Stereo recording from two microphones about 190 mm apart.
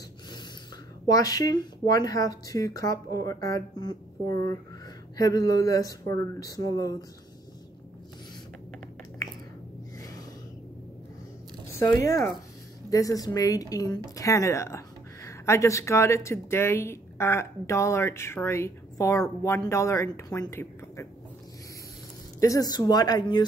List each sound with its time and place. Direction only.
1.0 s speech: 20° left (ahead or behind)
9.9 s a sound: 20° left (ahead or behind)
11.8 s speech: 15° left (ahead or behind)
22.4 s speech: 20° left (ahead or behind)